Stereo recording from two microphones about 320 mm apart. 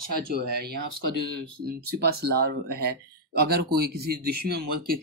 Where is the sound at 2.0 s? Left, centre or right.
Right.